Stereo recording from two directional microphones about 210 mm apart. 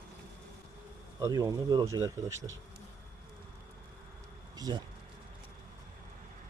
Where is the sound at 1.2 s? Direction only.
15° right (ahead or behind).